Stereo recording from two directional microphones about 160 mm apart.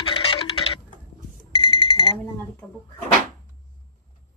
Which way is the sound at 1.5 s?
35° left (ahead or behind).